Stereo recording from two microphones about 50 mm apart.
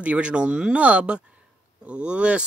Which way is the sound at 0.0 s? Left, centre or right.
Right.